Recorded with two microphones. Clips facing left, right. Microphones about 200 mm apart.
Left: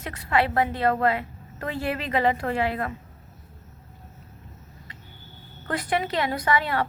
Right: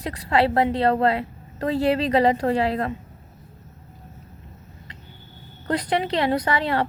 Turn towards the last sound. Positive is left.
turn(degrees=-30)  # may be behind; listen again after turning